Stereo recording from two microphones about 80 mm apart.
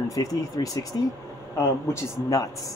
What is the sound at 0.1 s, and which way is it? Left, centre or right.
Speech, left.